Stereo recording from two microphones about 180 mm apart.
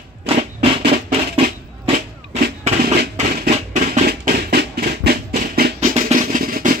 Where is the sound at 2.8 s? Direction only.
55° right (ahead or behind).